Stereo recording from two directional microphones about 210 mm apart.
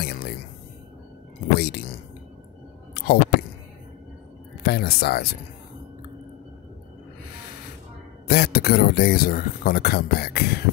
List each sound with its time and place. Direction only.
0.0 s music: 50° left (ahead or behind)
1.5 s speech: 50° left (ahead or behind)
2.9 s a sound: 50° left (ahead or behind)
4.6 s speech: 50° left (ahead or behind)
8.3 s speech: 50° left (ahead or behind)